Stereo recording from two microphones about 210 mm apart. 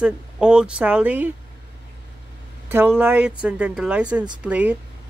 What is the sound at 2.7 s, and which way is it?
Speech, 10° right (ahead or behind).